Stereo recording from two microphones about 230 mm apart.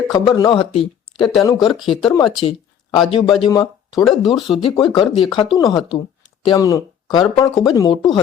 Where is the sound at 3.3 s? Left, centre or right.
Centre.